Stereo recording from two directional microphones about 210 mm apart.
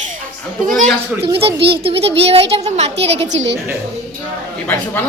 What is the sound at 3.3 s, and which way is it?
Speech, 60° right (ahead or behind).